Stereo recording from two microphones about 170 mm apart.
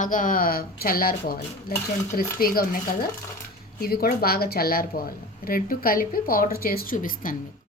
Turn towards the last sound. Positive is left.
turn(degrees=55)  # may be behind; listen again after turning